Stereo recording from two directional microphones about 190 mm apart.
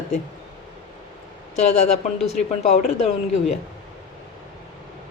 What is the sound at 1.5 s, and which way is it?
A woman's voice, 35° left (ahead or behind).